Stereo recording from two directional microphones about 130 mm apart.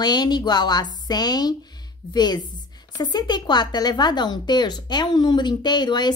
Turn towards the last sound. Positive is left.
turn(degrees=35)  # may be behind; listen again after turning